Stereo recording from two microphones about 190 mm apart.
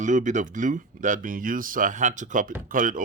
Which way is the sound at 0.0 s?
40° right (ahead or behind).